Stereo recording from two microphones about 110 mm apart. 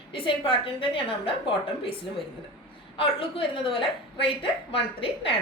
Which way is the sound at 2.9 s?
55° left (ahead or behind).